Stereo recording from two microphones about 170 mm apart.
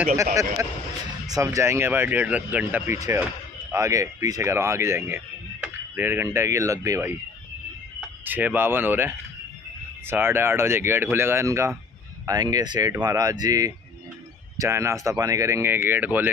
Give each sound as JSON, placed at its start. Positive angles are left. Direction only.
{"t": 0.0, "sound": "speech", "side_deg": -15}
{"t": 8.3, "sound": "speech", "side_deg": -10}